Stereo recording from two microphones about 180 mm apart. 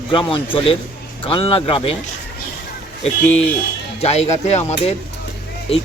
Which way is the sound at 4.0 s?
35° left (ahead or behind).